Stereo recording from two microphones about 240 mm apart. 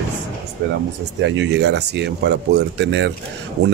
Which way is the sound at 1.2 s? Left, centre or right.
Right.